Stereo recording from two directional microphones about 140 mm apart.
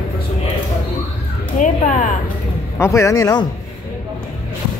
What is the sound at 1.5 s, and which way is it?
Speech, 65° left (ahead or behind).